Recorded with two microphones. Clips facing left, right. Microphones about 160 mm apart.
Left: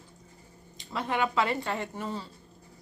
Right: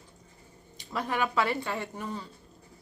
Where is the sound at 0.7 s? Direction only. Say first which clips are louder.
Left 1 dB; 25° left (ahead or behind).